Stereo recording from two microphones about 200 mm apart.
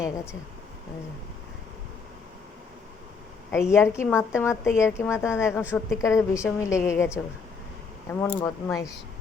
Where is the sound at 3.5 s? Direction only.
15° left (ahead or behind).